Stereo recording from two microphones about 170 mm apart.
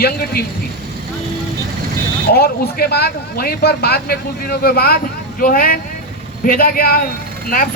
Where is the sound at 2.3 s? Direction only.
65° left (ahead or behind).